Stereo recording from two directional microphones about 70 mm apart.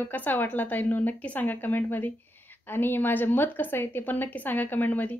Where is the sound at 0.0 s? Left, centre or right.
Left.